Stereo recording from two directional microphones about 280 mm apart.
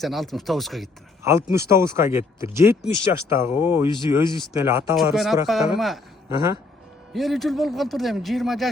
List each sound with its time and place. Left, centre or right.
0.0 s speech: centre
3.8 s speech: centre
4.5 s a man's voice: centre